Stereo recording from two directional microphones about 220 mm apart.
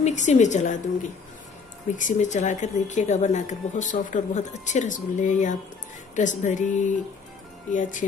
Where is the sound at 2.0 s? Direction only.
35° left (ahead or behind).